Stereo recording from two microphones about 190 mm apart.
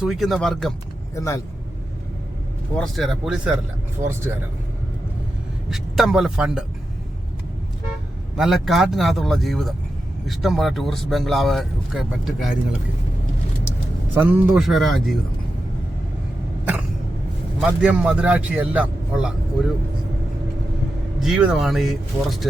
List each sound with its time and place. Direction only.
0.0 s speech: centre (ahead or behind)
1.1 s speech: 15° left (ahead or behind)
2.7 s a man's voice: centre (ahead or behind); by 4.4 s 15° right (ahead or behind)
5.7 s speech: centre (ahead or behind)
8.4 s speech: centre (ahead or behind)
14.2 s speech: 5° right (ahead or behind)
17.6 s a man's voice: 5° right (ahead or behind)
21.2 s speech: 5° right (ahead or behind)